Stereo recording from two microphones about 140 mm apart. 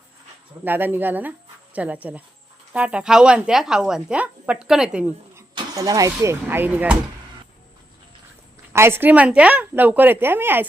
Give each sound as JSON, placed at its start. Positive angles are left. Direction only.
{"t": 0.6, "sound": "a woman's voice", "side_deg": -15}
{"t": 5.5, "sound": "speech", "side_deg": -25}
{"t": 6.1, "sound": "speech", "side_deg": -15}
{"t": 8.7, "sound": "speech", "side_deg": -15}